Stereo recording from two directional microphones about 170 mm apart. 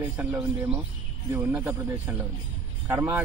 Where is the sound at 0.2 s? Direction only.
10° right (ahead or behind).